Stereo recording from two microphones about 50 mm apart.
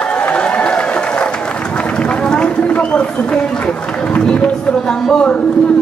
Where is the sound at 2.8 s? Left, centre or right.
Left.